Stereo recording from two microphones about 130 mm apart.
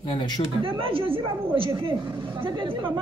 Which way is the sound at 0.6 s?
45° right (ahead or behind).